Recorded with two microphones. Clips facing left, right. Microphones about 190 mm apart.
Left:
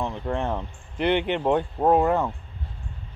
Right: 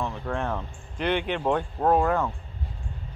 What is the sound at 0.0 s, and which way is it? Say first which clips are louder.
Speech: left 2 dB; 20° left (ahead or behind).